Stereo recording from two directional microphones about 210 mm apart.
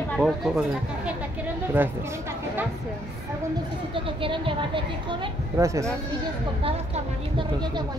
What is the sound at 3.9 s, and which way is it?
A woman's voice, 25° right (ahead or behind).